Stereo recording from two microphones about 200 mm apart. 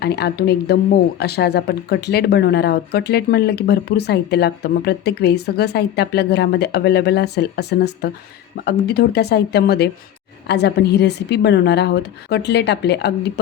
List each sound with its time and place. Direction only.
0.0 s speech: 55° left (ahead or behind)